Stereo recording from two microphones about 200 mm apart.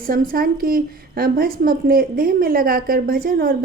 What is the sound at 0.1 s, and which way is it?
A woman's voice, 45° right (ahead or behind).